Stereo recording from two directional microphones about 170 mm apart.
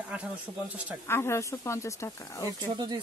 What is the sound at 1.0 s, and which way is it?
Speech, 15° left (ahead or behind).